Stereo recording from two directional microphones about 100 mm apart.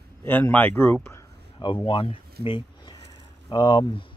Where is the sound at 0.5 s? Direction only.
20° left (ahead or behind).